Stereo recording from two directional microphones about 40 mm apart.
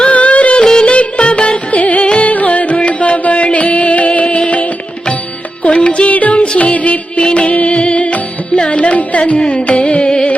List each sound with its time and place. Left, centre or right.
0.0 s music: left
0.6 s music: centre
0.9 s music: left
1.8 s music: left
2.0 s music: left
2.3 s music: left
5.6 s music: left
9.5 s carnatic music: left